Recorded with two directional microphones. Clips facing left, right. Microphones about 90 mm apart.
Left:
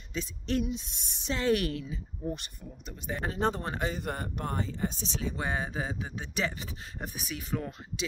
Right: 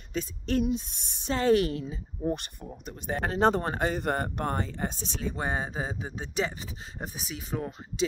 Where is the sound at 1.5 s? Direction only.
25° right (ahead or behind).